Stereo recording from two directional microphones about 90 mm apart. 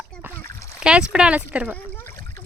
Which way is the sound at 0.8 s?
10° right (ahead or behind).